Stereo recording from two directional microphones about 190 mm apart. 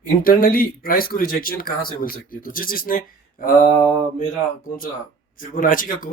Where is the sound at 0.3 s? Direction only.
50° left (ahead or behind).